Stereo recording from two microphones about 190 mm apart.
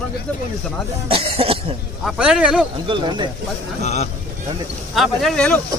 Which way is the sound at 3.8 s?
35° left (ahead or behind).